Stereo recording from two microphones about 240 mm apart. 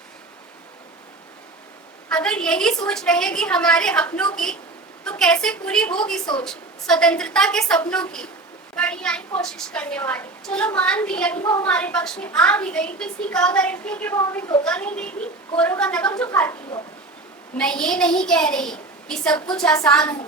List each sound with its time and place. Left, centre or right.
2.0 s a woman's voice: centre